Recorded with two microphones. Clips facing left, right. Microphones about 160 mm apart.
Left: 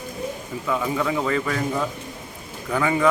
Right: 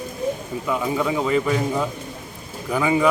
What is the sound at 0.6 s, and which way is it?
Speech, 15° right (ahead or behind).